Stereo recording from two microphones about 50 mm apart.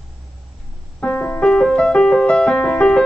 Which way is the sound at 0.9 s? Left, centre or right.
Left.